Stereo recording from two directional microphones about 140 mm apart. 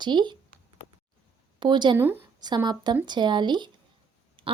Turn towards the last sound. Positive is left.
turn(degrees=-40)  # may be behind; listen again after turning